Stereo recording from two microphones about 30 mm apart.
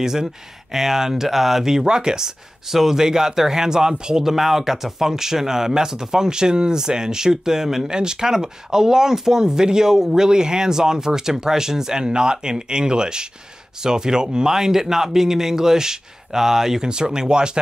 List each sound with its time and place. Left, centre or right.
0.0 s speech: centre
4.2 s speech: centre
7.9 s speech: right
16.9 s speech: right